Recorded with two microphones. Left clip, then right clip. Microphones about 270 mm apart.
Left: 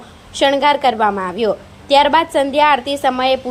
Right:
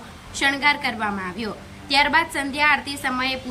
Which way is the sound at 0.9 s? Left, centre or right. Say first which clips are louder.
Left 10 dB; left.